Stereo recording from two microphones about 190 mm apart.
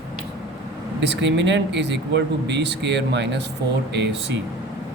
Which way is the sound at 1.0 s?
70° right (ahead or behind).